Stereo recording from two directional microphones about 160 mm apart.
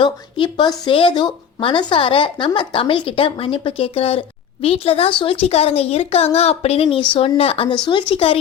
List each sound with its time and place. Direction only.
0.0 s a woman's voice: 30° left (ahead or behind)